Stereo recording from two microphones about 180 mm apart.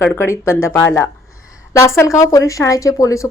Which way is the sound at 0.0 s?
15° left (ahead or behind).